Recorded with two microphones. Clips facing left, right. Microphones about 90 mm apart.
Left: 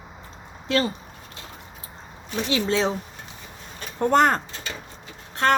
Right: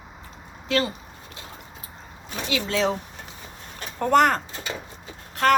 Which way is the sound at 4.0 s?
30° left (ahead or behind).